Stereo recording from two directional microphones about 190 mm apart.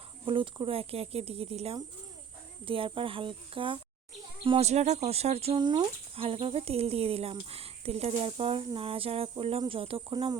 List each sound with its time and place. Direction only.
0.3 s speech: 25° right (ahead or behind)